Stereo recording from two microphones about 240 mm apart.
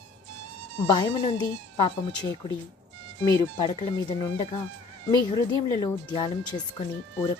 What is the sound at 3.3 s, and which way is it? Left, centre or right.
Speech, centre.